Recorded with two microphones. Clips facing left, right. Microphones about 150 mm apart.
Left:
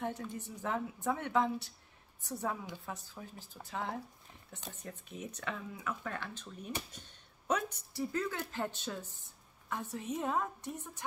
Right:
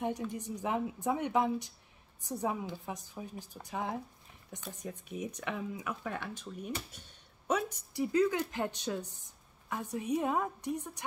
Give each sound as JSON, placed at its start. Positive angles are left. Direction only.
{"t": 0.0, "sound": "speech", "side_deg": -15}